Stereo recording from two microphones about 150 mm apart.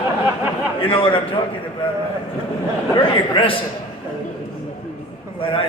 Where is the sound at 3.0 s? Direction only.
35° left (ahead or behind).